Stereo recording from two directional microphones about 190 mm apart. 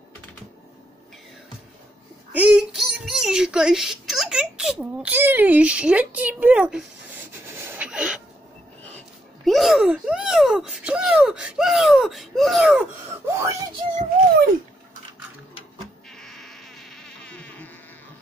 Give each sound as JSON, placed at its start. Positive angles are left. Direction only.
{"t": 2.3, "sound": "a sound", "side_deg": -5}
{"t": 8.9, "sound": "speech", "side_deg": 0}
{"t": 13.3, "sound": "speech", "side_deg": -15}
{"t": 13.9, "sound": "a child's voice", "side_deg": -50}
{"t": 16.1, "sound": "insect", "side_deg": 5}